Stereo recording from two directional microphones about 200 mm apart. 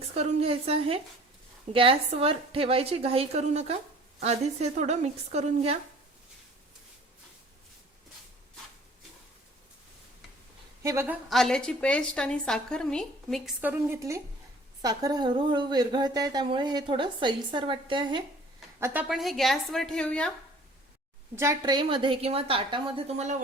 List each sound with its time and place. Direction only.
0.1 s a woman's voice: 30° right (ahead or behind)
10.8 s a woman's voice: 10° right (ahead or behind)
11.3 s a woman's voice: centre (ahead or behind)
13.6 s a woman's voice: 10° right (ahead or behind)
19.0 s a woman's voice: centre (ahead or behind)
21.3 s a woman's voice: 15° right (ahead or behind); by 23.4 s 35° right (ahead or behind)